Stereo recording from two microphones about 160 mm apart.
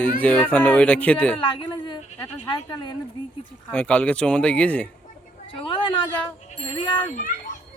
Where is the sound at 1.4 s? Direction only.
30° left (ahead or behind).